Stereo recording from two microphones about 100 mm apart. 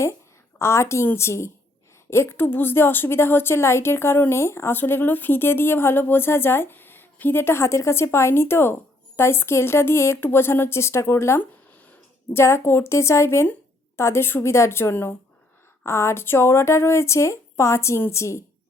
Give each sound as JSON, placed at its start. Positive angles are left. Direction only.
{"t": 0.6, "sound": "a woman's voice", "side_deg": 25}